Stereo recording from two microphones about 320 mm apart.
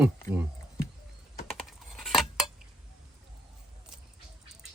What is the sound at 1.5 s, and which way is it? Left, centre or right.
Cutlery, centre.